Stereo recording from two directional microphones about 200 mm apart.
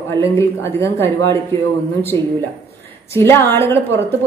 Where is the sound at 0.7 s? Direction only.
10° left (ahead or behind).